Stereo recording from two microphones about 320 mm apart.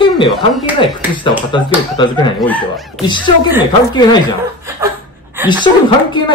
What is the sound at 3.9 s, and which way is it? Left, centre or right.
Speech, centre.